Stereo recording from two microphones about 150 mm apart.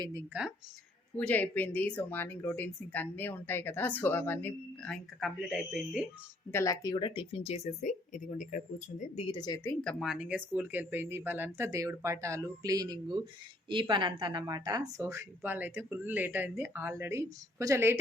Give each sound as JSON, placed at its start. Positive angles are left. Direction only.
{"t": 0.3, "sound": "speech", "side_deg": -10}
{"t": 1.1, "sound": "speech", "side_deg": 10}
{"t": 6.5, "sound": "speech", "side_deg": 20}
{"t": 9.1, "sound": "speech", "side_deg": 35}
{"t": 10.0, "sound": "speech", "side_deg": -5}